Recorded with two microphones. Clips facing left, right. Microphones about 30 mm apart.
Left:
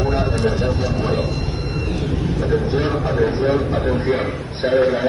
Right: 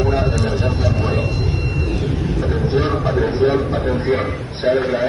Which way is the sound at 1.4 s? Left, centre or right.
Centre.